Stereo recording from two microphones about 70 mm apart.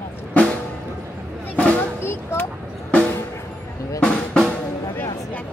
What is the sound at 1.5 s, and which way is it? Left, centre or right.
Drum, centre.